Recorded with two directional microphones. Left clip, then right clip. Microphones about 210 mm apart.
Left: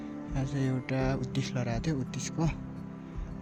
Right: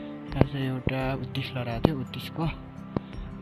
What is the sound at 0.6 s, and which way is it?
Speech, 15° left (ahead or behind).